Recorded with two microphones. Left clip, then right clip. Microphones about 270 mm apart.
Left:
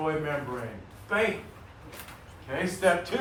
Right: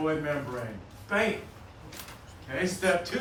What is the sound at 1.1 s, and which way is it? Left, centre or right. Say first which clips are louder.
Speech: left 1 dB; centre.